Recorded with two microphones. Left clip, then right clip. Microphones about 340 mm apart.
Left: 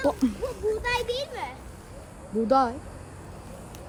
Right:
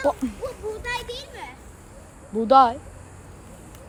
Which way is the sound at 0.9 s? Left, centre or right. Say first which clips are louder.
Left 3 dB; centre.